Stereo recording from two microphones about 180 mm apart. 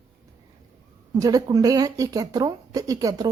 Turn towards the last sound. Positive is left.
turn(degrees=-20)  # may be behind; listen again after turning